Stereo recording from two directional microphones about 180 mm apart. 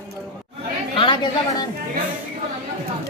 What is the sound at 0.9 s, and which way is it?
Speech, 25° left (ahead or behind).